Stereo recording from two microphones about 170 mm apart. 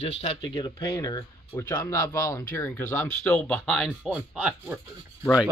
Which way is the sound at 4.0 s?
5° right (ahead or behind).